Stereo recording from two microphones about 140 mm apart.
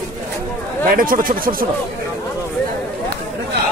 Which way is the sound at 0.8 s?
85° right.